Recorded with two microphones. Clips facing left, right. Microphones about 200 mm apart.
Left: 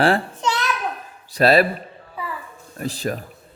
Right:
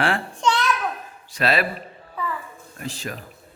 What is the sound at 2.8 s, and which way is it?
Speech, 40° left (ahead or behind).